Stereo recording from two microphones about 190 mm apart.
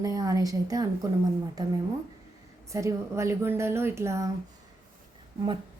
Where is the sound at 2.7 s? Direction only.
15° right (ahead or behind).